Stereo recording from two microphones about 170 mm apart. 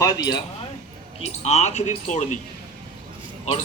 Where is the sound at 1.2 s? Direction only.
40° left (ahead or behind).